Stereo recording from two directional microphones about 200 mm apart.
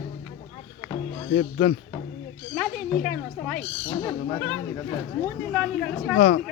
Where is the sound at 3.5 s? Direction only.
10° left (ahead or behind).